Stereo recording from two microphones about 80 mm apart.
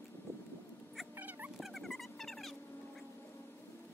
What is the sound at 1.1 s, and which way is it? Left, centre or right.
Dog, right.